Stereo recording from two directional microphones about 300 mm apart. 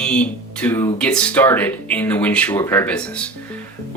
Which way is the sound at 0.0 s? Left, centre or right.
Centre.